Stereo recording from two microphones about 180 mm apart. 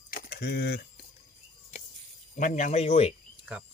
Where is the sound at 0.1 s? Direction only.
60° left (ahead or behind).